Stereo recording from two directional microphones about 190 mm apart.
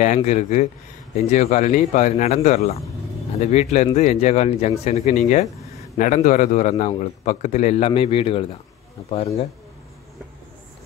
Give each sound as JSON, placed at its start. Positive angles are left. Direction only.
{"t": 0.0, "sound": "a man's voice", "side_deg": 40}